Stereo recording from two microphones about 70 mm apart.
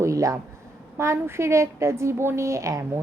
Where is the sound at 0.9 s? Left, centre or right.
Right.